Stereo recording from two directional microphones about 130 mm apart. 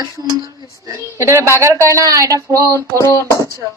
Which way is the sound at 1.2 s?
20° right (ahead or behind).